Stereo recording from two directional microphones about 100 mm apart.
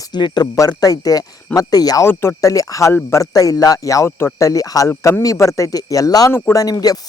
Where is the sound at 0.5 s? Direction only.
35° left (ahead or behind).